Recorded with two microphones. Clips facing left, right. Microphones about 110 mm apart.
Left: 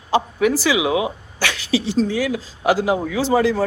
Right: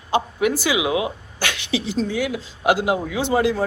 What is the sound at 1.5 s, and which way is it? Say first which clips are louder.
Speech: left 4 dB; 35° left (ahead or behind).